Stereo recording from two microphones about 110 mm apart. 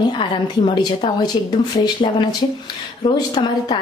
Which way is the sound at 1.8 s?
40° left (ahead or behind).